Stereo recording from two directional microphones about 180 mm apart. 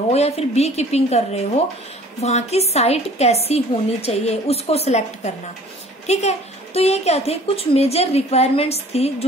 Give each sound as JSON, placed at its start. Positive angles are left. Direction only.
{"t": 0.1, "sound": "a woman's voice", "side_deg": 35}